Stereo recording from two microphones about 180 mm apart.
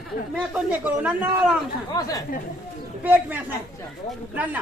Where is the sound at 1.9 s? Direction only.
20° left (ahead or behind).